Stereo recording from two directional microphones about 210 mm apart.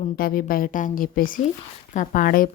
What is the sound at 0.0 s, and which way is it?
A woman's voice, 45° left (ahead or behind).